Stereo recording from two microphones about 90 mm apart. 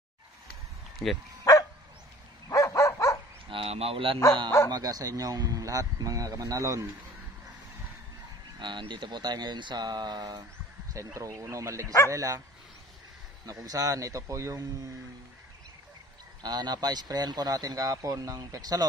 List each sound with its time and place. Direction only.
1.0 s speech: 5° left (ahead or behind)
1.4 s dog: 40° left (ahead or behind)
3.4 s speech: 90° right
4.6 s a man's voice: 45° right (ahead or behind)
8.5 s speech: 60° right (ahead or behind)
11.1 s a man's voice: 35° right (ahead or behind)
13.5 s a man's voice: 40° right (ahead or behind)
16.4 s a man's voice: 50° right (ahead or behind)